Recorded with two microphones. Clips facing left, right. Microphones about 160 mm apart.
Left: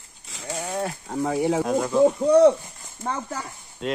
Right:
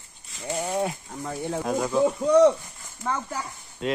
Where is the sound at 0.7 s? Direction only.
15° right (ahead or behind).